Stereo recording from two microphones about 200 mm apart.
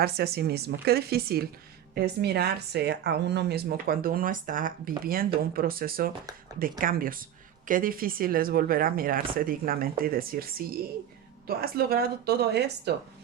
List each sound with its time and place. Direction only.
0.0 s speech: 50° right (ahead or behind)